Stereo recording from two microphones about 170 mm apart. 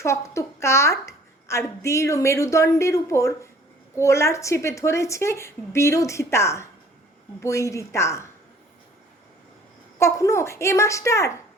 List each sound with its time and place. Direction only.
0.0 s a child's voice: 15° left (ahead or behind)
10.0 s a woman's voice: 15° left (ahead or behind)